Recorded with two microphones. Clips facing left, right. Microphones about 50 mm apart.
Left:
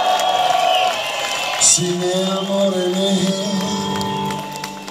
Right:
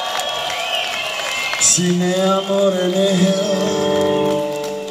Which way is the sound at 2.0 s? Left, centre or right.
Right.